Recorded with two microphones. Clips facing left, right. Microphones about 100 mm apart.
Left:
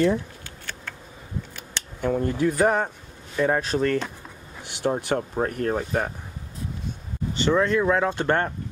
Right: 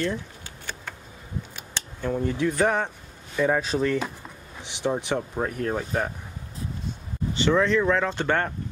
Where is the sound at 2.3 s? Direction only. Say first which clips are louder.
Left 2 dB; 45° left (ahead or behind).